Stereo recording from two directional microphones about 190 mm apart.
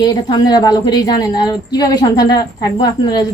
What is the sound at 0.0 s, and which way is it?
A woman's voice, 20° left (ahead or behind).